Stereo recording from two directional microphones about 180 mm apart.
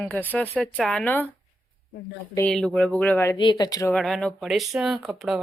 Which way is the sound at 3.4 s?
25° left (ahead or behind).